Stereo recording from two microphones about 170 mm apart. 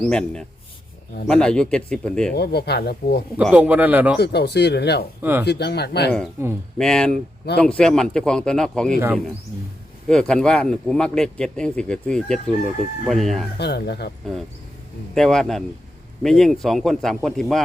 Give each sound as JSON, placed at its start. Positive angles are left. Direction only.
{"t": 0.0, "sound": "speech", "side_deg": 5}
{"t": 2.3, "sound": "speech", "side_deg": 75}
{"t": 3.3, "sound": "a man's voice", "side_deg": -10}
{"t": 4.2, "sound": "speech", "side_deg": 75}
{"t": 5.2, "sound": "a man's voice", "side_deg": -10}
{"t": 5.5, "sound": "speech", "side_deg": 75}
{"t": 6.4, "sound": "a man's voice", "side_deg": -15}
{"t": 6.7, "sound": "speech", "side_deg": 5}
{"t": 10.1, "sound": "speech", "side_deg": 5}
{"t": 13.6, "sound": "speech", "side_deg": 75}
{"t": 15.1, "sound": "speech", "side_deg": 5}